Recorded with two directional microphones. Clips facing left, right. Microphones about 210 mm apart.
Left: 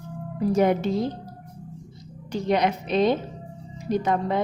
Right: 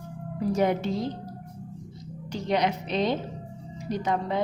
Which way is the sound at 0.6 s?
55° left (ahead or behind).